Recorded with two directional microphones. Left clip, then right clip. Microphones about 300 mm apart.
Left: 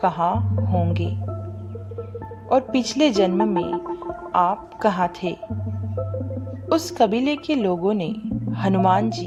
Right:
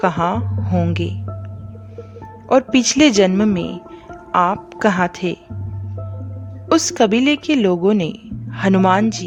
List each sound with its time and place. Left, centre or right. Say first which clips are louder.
0.0 s a woman's voice: right 3 dB; right
2.5 s a woman's voice: right 5 dB; right
6.7 s a woman's voice: right 4 dB; right